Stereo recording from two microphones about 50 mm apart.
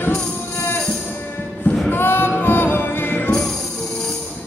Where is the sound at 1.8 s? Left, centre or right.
Left.